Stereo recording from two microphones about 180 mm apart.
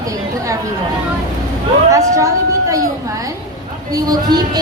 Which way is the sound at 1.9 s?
15° right (ahead or behind).